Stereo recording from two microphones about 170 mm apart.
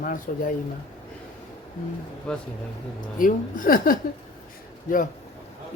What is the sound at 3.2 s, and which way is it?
Speech, 55° left (ahead or behind).